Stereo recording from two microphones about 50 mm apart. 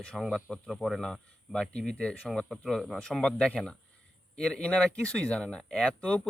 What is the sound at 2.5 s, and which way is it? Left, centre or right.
Speech, centre.